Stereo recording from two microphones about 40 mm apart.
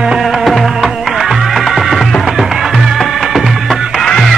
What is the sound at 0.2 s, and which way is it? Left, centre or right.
Music, centre.